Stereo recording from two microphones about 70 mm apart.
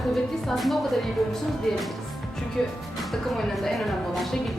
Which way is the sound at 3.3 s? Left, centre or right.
Centre.